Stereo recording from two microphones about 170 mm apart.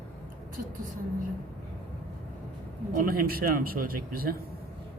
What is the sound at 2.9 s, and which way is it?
Speech, 60° right (ahead or behind).